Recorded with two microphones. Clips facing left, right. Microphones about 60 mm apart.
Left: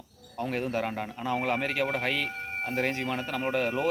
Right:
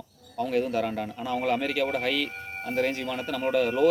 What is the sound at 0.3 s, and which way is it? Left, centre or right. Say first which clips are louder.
Speech: right 4 dB; left.